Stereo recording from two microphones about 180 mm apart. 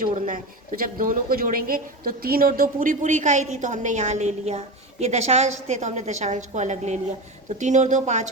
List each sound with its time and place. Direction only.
0.0 s speech: 50° right (ahead or behind)